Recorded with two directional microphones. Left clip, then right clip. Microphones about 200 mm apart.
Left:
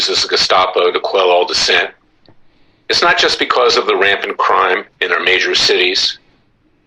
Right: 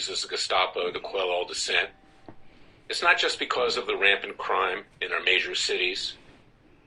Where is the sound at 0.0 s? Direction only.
45° left (ahead or behind).